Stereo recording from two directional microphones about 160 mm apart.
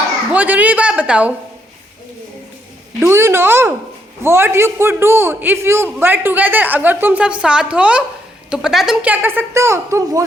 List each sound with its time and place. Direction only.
0.3 s a man's voice: 10° right (ahead or behind)
3.0 s a man's voice: 15° right (ahead or behind)